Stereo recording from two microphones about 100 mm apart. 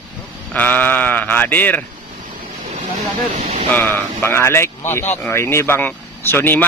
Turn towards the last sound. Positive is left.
turn(degrees=20)  # may be behind; listen again after turning